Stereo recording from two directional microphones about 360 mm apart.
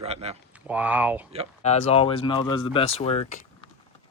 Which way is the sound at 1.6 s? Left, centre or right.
Centre.